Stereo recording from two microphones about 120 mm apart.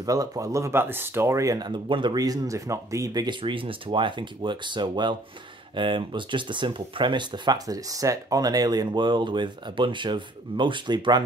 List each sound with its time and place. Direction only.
0.0 s speech: 30° right (ahead or behind)